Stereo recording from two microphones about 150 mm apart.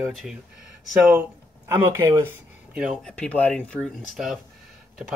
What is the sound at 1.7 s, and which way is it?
Speech, 20° right (ahead or behind).